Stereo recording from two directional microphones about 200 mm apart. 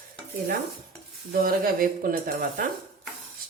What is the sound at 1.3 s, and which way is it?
Speech, 45° right (ahead or behind).